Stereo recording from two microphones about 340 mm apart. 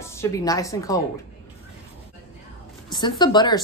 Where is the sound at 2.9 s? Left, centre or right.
Centre.